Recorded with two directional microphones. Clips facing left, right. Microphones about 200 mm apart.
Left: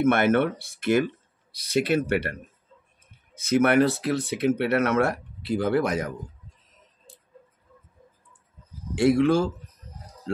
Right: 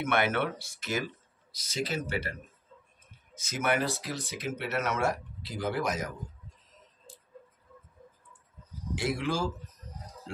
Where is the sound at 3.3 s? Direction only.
60° left (ahead or behind).